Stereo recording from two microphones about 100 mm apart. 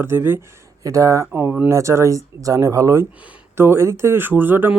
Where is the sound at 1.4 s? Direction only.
20° right (ahead or behind).